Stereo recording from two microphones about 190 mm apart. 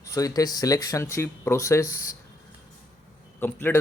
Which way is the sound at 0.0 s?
15° left (ahead or behind).